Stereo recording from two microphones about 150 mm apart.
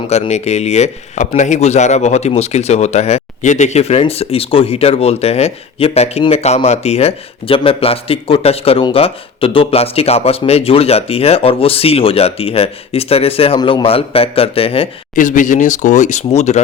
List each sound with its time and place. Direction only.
0.1 s speech: 45° left (ahead or behind)
15.1 s speech: 60° left (ahead or behind)